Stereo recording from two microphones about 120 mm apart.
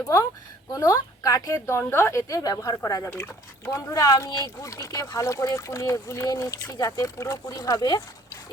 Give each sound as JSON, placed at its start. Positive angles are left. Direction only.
{"t": 0.7, "sound": "speech", "side_deg": 30}